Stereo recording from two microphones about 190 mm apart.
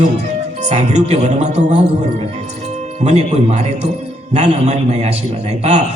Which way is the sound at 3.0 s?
35° right (ahead or behind).